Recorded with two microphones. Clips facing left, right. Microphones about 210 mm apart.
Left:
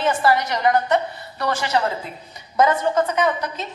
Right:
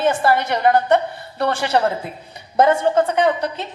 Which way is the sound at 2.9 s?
55° right (ahead or behind).